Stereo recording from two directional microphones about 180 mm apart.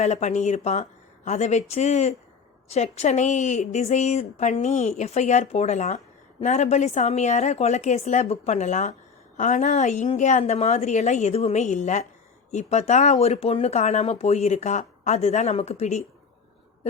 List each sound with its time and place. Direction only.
0.0 s speech: 40° left (ahead or behind)